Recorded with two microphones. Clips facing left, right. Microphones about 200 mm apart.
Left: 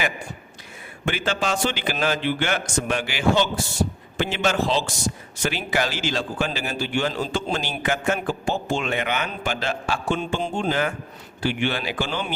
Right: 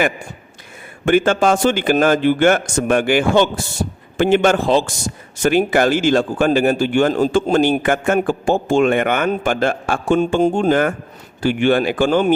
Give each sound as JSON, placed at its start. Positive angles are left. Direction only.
{"t": 1.0, "sound": "a man's voice", "side_deg": -50}